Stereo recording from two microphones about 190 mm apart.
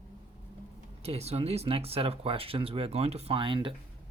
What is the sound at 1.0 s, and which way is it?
Speech, 35° right (ahead or behind).